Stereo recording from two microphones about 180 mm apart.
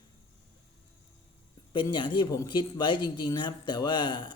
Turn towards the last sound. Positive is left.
turn(degrees=25)  # may be behind; listen again after turning